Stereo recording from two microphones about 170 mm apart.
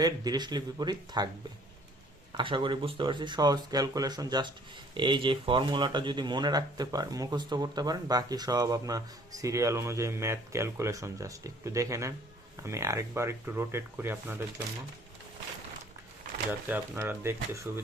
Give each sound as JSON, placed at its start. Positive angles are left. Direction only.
{"t": 0.0, "sound": "speech", "side_deg": -25}
{"t": 2.3, "sound": "speech", "side_deg": -30}
{"t": 16.5, "sound": "speech", "side_deg": -10}